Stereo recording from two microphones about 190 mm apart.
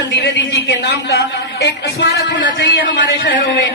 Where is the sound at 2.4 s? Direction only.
75° left (ahead or behind).